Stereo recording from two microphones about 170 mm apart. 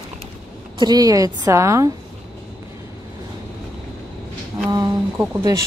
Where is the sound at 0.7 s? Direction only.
25° right (ahead or behind).